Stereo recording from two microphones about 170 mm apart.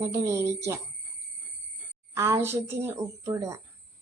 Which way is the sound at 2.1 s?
15° right (ahead or behind).